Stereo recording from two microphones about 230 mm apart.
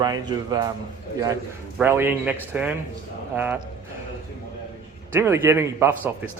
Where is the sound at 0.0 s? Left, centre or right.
Centre.